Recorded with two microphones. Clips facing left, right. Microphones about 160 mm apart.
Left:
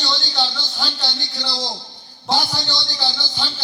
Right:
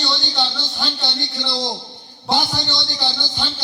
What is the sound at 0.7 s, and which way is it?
A man's voice, 20° right (ahead or behind).